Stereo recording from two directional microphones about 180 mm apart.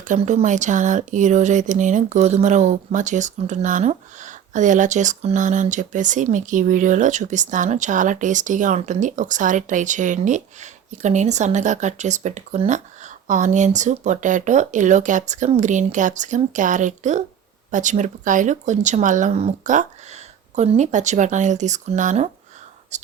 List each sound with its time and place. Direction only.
0.0 s speech: 45° right (ahead or behind)